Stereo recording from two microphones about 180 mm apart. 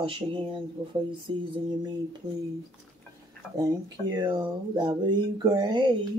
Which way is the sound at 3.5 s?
20° right (ahead or behind).